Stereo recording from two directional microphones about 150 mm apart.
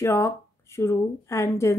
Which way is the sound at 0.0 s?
20° left (ahead or behind).